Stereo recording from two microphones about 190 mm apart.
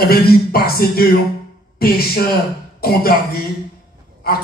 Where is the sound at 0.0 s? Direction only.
55° left (ahead or behind).